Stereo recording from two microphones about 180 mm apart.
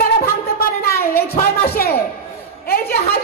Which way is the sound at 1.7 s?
55° left (ahead or behind).